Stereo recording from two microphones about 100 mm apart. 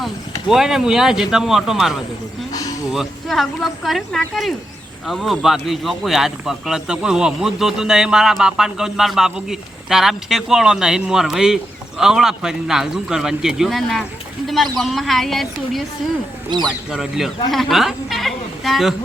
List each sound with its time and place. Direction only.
0.4 s speech: 5° right (ahead or behind)
2.5 s a sound: 40° left (ahead or behind)
2.9 s speech: centre (ahead or behind)